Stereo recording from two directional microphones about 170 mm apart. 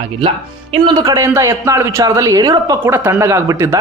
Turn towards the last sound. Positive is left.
turn(degrees=-15)  # may be behind; listen again after turning